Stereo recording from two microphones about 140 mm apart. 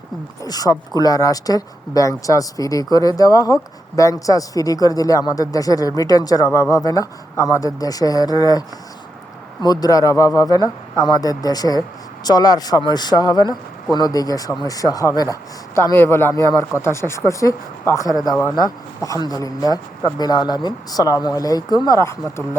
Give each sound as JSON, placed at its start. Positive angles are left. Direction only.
{"t": 0.4, "sound": "speech", "side_deg": 25}